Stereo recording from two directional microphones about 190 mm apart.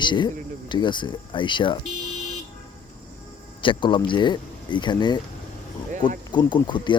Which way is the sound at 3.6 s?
25° left (ahead or behind).